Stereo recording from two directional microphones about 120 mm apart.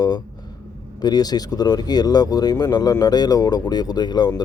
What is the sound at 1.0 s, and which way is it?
Speech, 35° left (ahead or behind).